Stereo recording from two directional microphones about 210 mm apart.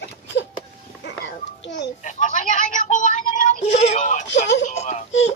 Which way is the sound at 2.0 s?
35° left (ahead or behind).